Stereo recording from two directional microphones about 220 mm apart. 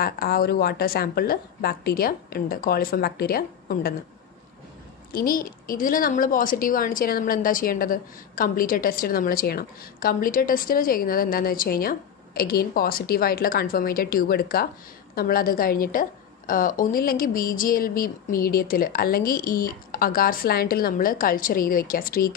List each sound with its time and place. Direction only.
0.0 s a woman's voice: 45° left (ahead or behind)
5.1 s a woman's voice: 40° left (ahead or behind)